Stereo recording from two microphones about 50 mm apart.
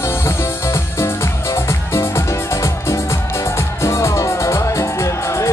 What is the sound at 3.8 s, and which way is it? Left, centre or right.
Music, left.